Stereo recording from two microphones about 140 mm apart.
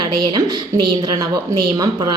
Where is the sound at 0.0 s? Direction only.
30° right (ahead or behind).